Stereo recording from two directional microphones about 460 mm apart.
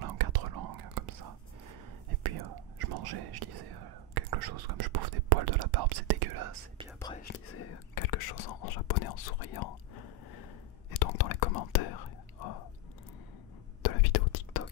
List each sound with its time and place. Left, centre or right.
0.0 s whispering: right
2.2 s whispering: right
7.2 s whispering: left
7.9 s whispering: left
10.9 s whispering: left
13.8 s whispering: left